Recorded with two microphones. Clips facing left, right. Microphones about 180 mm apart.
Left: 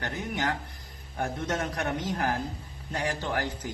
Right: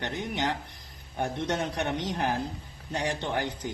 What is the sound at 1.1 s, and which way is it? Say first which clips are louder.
A man's voice: right 1 dB; 30° right (ahead or behind).